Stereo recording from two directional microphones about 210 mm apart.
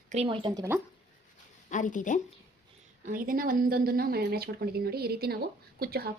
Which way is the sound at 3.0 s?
40° right (ahead or behind).